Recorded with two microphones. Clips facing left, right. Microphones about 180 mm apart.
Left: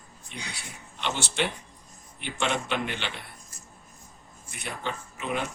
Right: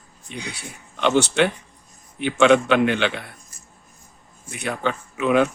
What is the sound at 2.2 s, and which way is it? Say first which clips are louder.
Speech: right 14 dB; 80° right.